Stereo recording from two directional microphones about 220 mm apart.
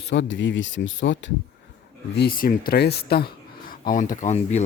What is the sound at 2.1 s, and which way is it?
Speech, 45° left (ahead or behind).